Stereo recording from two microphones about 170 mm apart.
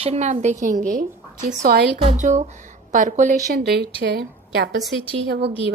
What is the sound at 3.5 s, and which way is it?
Speech, 65° right (ahead or behind).